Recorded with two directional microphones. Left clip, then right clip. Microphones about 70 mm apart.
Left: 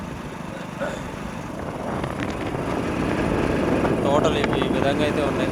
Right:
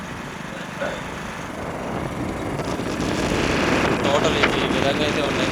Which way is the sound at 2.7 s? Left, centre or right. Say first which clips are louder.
Left 1 dB; centre.